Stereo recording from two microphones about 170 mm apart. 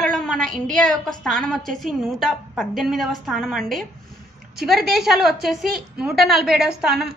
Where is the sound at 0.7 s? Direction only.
5° left (ahead or behind).